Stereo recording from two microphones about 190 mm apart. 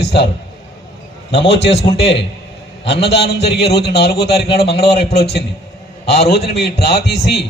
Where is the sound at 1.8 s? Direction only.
60° left (ahead or behind).